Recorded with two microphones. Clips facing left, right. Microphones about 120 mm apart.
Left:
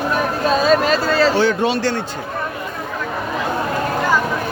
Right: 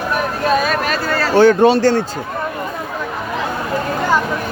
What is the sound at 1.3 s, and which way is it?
Speech, 50° right (ahead or behind).